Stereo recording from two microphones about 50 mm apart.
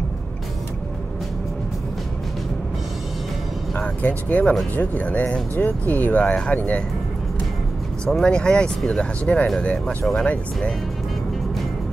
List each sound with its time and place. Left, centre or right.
4.0 s speech: left
6.2 s speech: centre
6.5 s speech: left
8.0 s speech: centre
9.8 s speech: centre
10.2 s speech: left